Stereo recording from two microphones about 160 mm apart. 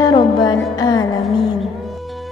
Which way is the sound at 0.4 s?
20° left (ahead or behind).